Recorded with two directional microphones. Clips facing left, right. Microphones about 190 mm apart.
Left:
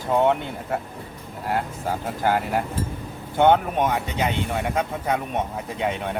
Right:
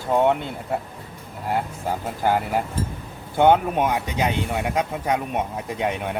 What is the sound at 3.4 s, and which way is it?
Speech, 10° right (ahead or behind).